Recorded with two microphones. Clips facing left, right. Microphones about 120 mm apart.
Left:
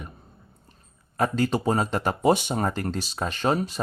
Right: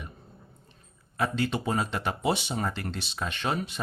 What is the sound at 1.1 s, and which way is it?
Speech, 40° left (ahead or behind).